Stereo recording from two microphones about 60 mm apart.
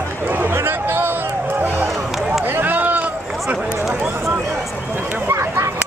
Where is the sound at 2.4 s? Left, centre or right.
Right.